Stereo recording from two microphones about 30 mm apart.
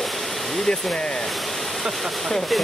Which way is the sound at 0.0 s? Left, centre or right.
Centre.